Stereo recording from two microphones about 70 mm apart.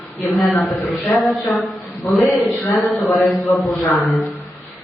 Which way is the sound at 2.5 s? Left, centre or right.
Centre.